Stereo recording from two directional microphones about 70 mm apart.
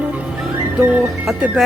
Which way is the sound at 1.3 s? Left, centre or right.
Centre.